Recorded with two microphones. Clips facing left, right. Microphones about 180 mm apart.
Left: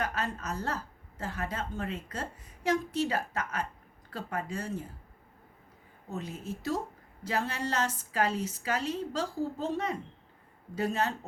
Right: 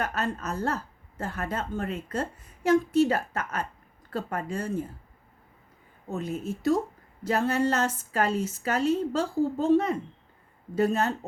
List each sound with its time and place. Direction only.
0.0 s a woman's voice: 50° right (ahead or behind)
6.1 s a woman's voice: 50° right (ahead or behind)